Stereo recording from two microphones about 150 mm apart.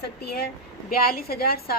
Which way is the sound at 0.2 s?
90° left.